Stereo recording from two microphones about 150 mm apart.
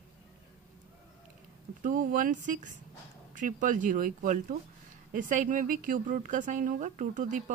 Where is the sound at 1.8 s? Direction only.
65° right (ahead or behind).